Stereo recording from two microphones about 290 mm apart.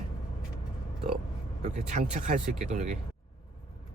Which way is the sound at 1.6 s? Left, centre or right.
Right.